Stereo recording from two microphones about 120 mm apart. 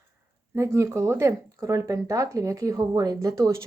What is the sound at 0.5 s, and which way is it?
Speech, 25° right (ahead or behind).